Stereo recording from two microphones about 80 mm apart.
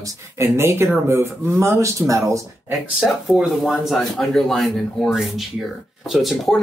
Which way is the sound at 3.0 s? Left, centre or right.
Centre.